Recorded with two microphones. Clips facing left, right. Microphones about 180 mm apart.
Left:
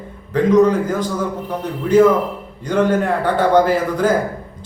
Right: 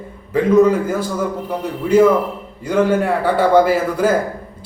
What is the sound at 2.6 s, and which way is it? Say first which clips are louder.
A man's voice: right 1 dB; 10° right (ahead or behind).